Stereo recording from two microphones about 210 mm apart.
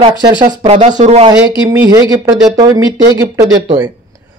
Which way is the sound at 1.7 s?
15° right (ahead or behind).